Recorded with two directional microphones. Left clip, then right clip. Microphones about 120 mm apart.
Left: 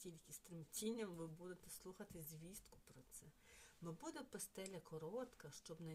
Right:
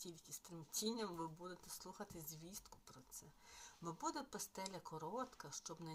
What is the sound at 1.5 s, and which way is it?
Speech, 45° left (ahead or behind).